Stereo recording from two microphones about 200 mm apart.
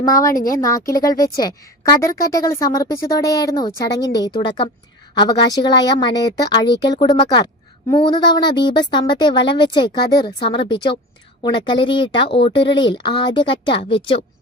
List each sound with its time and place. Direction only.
0.0 s a woman's voice: 15° left (ahead or behind)
0.3 s speech: 45° left (ahead or behind)
0.6 s a woman's voice: 15° left (ahead or behind)